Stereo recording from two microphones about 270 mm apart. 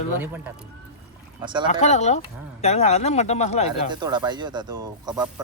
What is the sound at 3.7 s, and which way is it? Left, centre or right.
Speech, centre.